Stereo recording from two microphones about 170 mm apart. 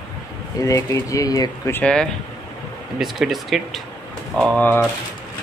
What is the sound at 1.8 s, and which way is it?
Speech, 5° left (ahead or behind).